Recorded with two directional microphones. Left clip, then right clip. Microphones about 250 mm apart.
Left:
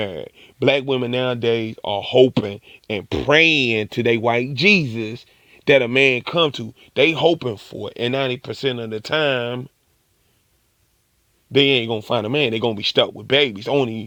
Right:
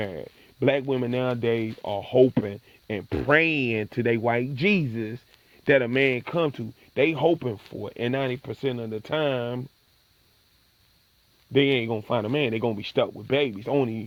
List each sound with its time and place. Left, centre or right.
0.0 s speech: left
11.5 s speech: left